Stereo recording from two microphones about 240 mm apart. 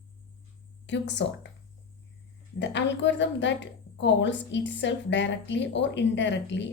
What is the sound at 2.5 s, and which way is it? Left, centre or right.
A woman's voice, left.